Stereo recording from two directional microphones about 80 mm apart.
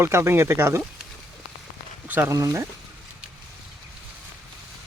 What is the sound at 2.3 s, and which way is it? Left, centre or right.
Speech, right.